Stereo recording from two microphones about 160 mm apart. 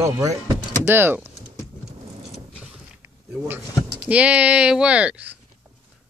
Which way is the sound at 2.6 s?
10° right (ahead or behind).